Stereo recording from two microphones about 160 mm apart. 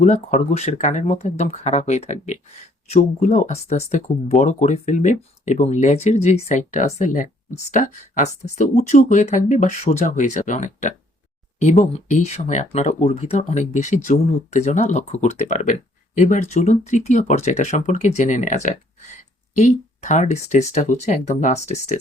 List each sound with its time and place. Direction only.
0.0 s speech: 50° left (ahead or behind)